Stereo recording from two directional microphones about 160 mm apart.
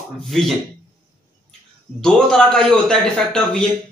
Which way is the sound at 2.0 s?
5° left (ahead or behind).